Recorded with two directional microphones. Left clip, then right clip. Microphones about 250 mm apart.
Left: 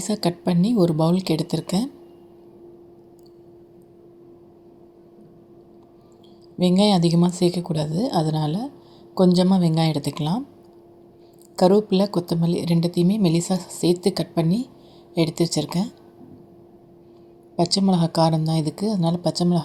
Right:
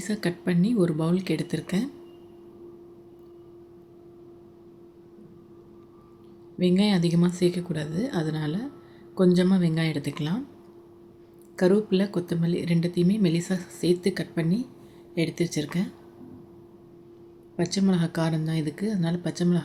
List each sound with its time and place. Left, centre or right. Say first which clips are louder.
0.0 s speech: left 5 dB; left
6.6 s speech: left 6 dB; left
11.5 s speech: left 5 dB; left
17.6 s speech: left 6 dB; left